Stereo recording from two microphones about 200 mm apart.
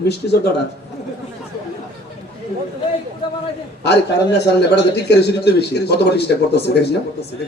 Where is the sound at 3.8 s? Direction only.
55° left (ahead or behind).